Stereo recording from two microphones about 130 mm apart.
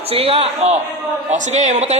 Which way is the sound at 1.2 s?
65° right (ahead or behind).